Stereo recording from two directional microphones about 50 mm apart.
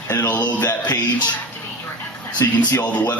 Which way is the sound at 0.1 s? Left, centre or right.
Left.